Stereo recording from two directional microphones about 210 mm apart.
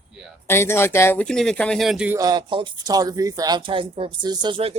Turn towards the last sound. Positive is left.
turn(degrees=-25)  # may be behind; listen again after turning